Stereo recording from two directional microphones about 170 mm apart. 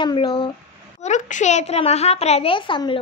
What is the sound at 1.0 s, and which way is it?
A child's voice, 45° left (ahead or behind).